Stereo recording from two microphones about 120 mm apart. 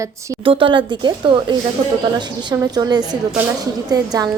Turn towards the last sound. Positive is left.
turn(degrees=-30)  # may be behind; listen again after turning